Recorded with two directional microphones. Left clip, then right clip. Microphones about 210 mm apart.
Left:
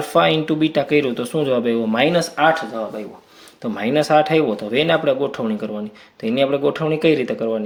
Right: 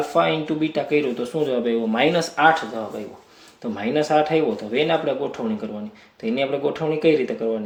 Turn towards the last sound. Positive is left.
turn(degrees=35)  # may be behind; listen again after turning